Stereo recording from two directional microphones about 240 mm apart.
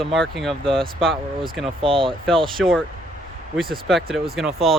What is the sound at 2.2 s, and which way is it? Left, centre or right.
Speech, centre.